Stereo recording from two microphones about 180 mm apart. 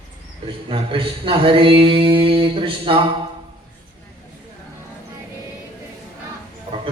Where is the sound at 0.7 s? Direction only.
30° right (ahead or behind).